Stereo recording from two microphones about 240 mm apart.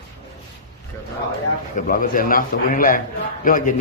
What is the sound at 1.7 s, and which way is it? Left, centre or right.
A man's voice, left.